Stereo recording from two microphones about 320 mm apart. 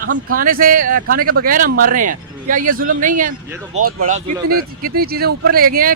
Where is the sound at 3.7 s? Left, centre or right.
Right.